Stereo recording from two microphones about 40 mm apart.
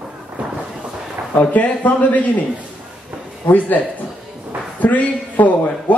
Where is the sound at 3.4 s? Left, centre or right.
Left.